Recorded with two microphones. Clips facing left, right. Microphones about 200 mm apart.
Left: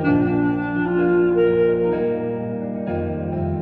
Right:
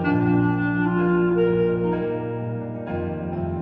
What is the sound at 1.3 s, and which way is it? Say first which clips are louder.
Music: left 3 dB; 70° left (ahead or behind).